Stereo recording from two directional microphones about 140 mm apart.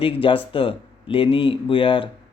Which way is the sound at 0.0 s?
40° left (ahead or behind).